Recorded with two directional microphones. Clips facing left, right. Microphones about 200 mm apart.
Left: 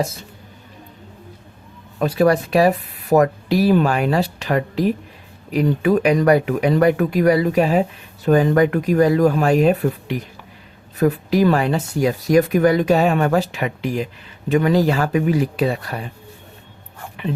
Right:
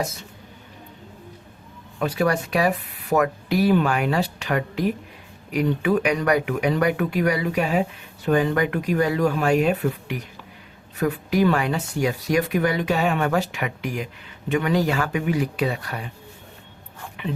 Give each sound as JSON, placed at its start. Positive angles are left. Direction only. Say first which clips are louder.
{"t": 2.0, "sound": "speech", "louder": "left 6 dB", "side_deg": 35}